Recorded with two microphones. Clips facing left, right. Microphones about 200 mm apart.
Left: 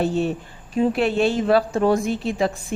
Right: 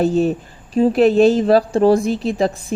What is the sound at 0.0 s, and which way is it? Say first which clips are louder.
A woman's voice: right 5 dB; 40° right (ahead or behind).